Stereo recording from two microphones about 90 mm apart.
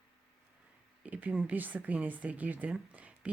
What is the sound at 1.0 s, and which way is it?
Speech, 15° right (ahead or behind).